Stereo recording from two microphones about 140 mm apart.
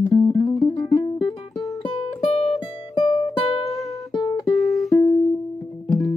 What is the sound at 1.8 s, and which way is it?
Music, 35° left (ahead or behind).